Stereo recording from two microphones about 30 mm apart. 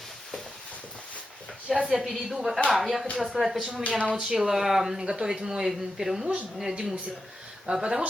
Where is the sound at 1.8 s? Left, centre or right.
Centre.